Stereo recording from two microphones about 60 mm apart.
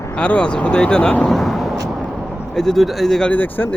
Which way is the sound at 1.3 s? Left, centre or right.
Centre.